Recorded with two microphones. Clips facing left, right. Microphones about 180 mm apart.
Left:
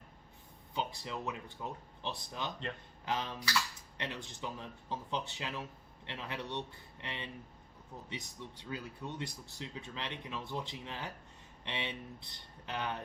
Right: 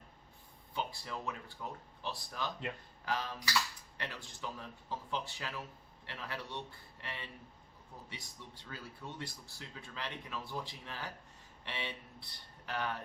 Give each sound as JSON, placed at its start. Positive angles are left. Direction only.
{"t": 0.7, "sound": "speech", "side_deg": 20}